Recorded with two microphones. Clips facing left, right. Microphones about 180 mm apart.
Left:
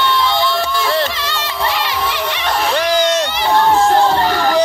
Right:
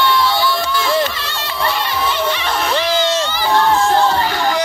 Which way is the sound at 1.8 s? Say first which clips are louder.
Right 1 dB; 80° left.